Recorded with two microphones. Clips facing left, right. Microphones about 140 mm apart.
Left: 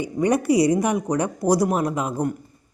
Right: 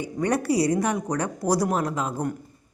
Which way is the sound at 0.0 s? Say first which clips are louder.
Left 4 dB; 15° left (ahead or behind).